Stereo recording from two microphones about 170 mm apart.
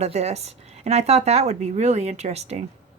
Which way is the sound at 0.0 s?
40° right (ahead or behind).